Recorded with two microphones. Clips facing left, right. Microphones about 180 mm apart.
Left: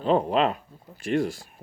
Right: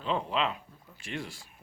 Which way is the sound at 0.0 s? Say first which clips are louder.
Left 9 dB; 45° left (ahead or behind).